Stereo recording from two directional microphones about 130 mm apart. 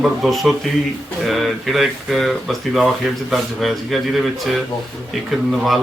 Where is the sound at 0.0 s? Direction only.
Centre (ahead or behind).